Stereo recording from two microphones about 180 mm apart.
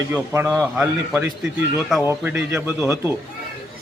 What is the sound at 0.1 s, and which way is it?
A man's voice, 10° right (ahead or behind).